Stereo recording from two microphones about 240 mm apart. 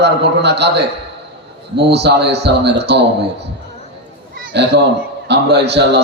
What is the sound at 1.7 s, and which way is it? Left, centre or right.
Mantra, right.